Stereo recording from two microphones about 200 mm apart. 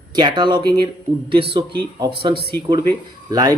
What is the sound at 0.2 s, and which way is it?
A man's voice, 20° right (ahead or behind).